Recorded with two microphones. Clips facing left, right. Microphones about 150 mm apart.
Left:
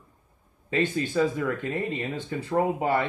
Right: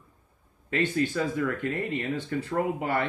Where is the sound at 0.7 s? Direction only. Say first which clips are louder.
Left 2 dB; 20° left (ahead or behind).